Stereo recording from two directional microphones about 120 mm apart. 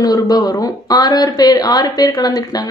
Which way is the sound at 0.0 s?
30° left (ahead or behind).